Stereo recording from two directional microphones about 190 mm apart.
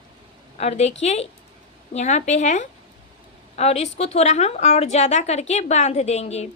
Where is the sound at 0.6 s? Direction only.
35° left (ahead or behind).